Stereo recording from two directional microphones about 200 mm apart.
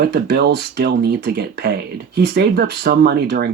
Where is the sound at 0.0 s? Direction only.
55° right (ahead or behind).